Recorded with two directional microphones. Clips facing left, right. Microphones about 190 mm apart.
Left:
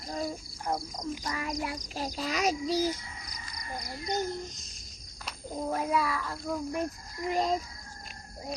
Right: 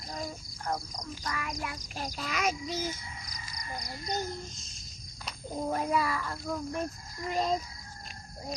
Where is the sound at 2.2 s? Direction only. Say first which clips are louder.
Left 3 dB; 35° left (ahead or behind).